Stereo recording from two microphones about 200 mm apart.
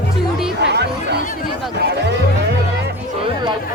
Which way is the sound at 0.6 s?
55° right (ahead or behind).